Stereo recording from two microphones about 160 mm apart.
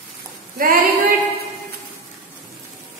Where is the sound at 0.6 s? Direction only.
60° right (ahead or behind).